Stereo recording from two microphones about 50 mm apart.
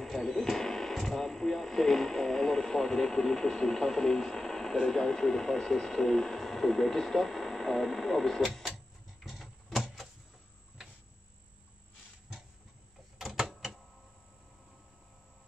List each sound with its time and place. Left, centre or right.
0.0 s speech: centre
8.6 s tick-tock: centre
13.2 s typewriter: centre